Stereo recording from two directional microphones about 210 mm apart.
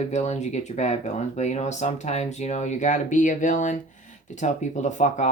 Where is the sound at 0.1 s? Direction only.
35° left (ahead or behind).